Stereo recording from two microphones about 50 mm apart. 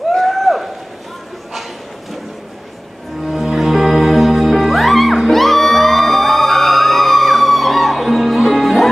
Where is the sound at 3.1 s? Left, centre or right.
Centre.